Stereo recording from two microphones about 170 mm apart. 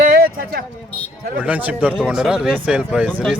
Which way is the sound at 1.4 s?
10° right (ahead or behind).